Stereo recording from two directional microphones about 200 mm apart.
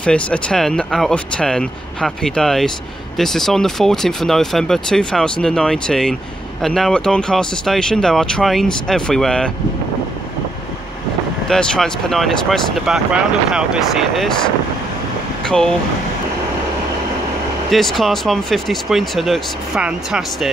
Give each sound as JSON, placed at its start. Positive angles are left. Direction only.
{"t": 0.0, "sound": "speech", "side_deg": 5}
{"t": 11.4, "sound": "speech", "side_deg": 5}
{"t": 15.4, "sound": "speech", "side_deg": 5}
{"t": 17.6, "sound": "speech", "side_deg": 0}